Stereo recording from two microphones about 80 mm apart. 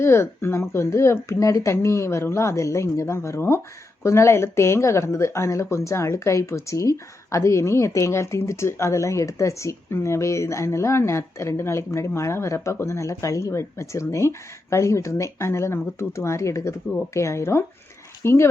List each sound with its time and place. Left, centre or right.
0.0 s speech: left